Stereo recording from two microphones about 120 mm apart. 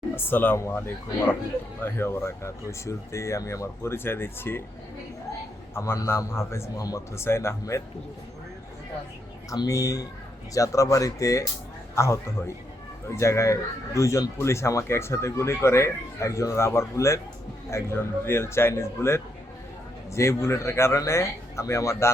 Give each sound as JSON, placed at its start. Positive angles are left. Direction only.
{"t": 0.3, "sound": "speech", "side_deg": 15}
{"t": 5.7, "sound": "speech", "side_deg": 20}
{"t": 9.5, "sound": "speech", "side_deg": 30}